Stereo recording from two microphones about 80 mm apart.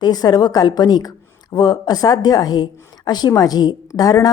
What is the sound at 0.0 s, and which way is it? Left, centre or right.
A woman's voice, left.